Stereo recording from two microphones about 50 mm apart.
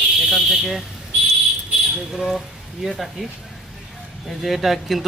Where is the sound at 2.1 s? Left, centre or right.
Centre.